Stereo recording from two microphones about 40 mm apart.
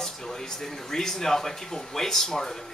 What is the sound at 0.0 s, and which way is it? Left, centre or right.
Speech, centre.